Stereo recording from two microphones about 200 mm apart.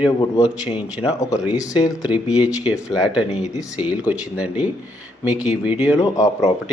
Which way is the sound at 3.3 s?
35° left (ahead or behind).